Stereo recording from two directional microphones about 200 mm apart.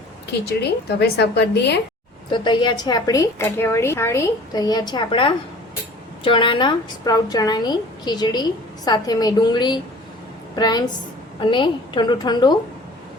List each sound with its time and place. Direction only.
0.3 s a woman's voice: 55° left (ahead or behind)
2.3 s a woman's voice: 25° left (ahead or behind)